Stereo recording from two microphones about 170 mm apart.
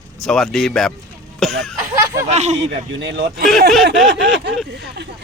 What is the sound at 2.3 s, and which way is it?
Speech, 40° right (ahead or behind).